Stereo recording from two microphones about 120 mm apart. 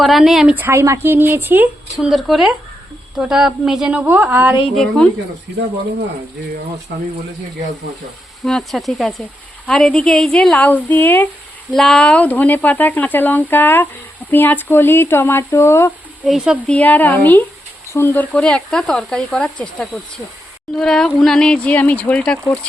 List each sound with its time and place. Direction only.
0.0 s speech: centre (ahead or behind)
0.5 s speech: 20° right (ahead or behind)
2.0 s speech: centre (ahead or behind)
4.7 s speech: 5° left (ahead or behind)
8.4 s speech: centre (ahead or behind)
11.7 s speech: 5° left (ahead or behind); by 15.9 s 20° left (ahead or behind)
16.2 s speech: 5° right (ahead or behind)
16.6 s speech: 10° left (ahead or behind)